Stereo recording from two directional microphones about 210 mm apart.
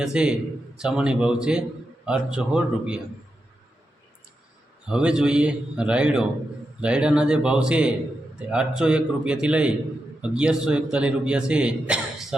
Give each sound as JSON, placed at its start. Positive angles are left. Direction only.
{"t": 0.0, "sound": "a man's voice", "side_deg": -5}
{"t": 4.9, "sound": "a man's voice", "side_deg": -5}